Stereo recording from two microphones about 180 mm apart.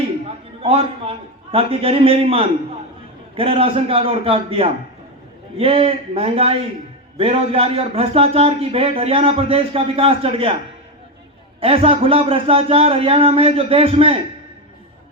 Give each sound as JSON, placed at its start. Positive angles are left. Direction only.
{"t": 0.3, "sound": "a man's voice", "side_deg": -30}
{"t": 11.6, "sound": "a man's voice", "side_deg": -30}